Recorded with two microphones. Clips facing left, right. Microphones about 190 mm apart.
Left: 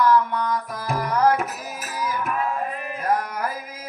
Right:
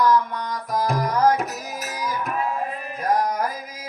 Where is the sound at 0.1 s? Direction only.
40° right (ahead or behind).